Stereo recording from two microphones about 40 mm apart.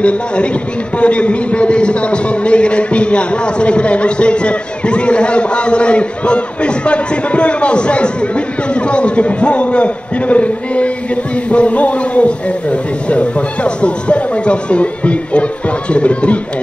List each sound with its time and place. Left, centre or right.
0.0 s a man's voice: left